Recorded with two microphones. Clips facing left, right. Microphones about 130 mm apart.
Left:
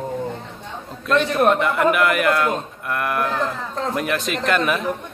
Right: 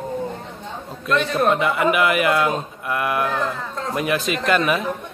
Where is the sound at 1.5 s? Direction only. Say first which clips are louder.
Left 1 dB; 5° right (ahead or behind).